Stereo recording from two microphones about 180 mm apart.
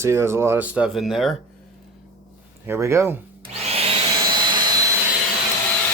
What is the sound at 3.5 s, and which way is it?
Vacuum cleaner, 35° right (ahead or behind).